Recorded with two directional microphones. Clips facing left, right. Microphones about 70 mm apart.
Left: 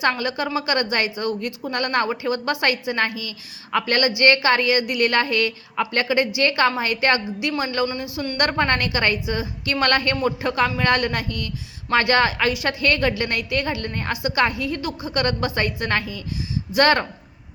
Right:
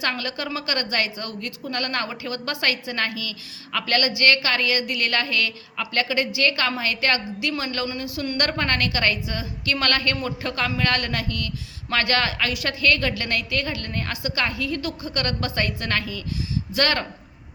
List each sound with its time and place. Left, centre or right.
0.0 s a woman's voice: centre
7.9 s speech: centre
8.4 s a woman's voice: left